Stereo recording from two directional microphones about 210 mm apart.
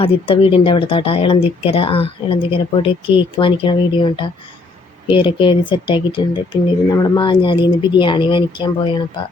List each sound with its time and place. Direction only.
0.0 s speech: 25° left (ahead or behind)